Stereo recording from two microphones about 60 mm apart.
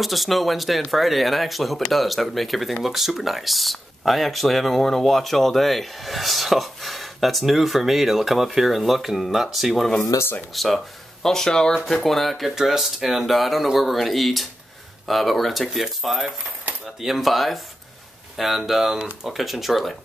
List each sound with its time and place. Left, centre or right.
0.0 s speech: centre
10.0 s speech: left
10.5 s speech: centre